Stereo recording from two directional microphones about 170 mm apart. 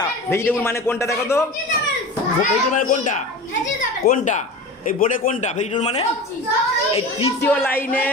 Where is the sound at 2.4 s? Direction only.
45° left (ahead or behind).